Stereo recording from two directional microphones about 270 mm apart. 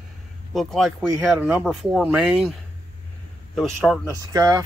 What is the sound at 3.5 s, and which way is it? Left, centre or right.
Speech, centre.